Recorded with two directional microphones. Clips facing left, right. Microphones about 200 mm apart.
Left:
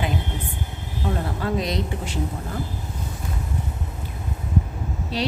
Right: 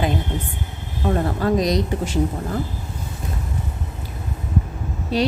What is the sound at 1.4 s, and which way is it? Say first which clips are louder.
Speech: right 6 dB; 40° right (ahead or behind).